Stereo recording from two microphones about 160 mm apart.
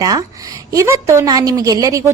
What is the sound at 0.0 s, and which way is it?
A woman's voice, 20° right (ahead or behind).